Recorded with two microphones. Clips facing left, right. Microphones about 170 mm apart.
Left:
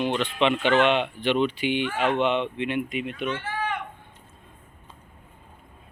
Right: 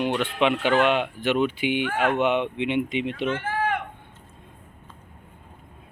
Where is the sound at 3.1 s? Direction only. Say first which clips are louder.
Right 3 dB; 30° right (ahead or behind).